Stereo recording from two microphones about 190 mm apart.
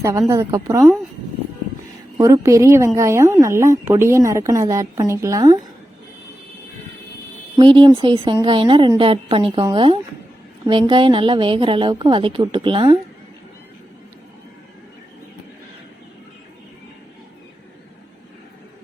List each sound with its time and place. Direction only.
0.0 s a woman's voice: 15° right (ahead or behind)
2.1 s a woman's voice: 15° right (ahead or behind)
7.6 s a woman's voice: 25° right (ahead or behind)